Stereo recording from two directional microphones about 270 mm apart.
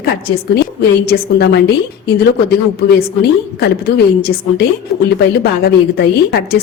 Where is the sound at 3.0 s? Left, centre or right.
Left.